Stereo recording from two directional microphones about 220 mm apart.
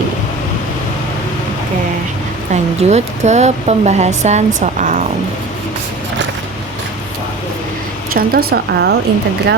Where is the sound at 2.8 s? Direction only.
30° right (ahead or behind).